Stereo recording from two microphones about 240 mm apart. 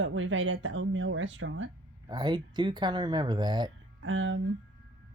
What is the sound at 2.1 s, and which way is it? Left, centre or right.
Speech, centre.